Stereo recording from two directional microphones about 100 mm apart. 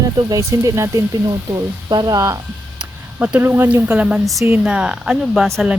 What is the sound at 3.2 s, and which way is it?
Speech, 20° right (ahead or behind).